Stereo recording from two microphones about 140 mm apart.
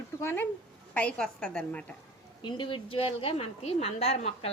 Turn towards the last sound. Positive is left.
turn(degrees=45)  # may be behind; listen again after turning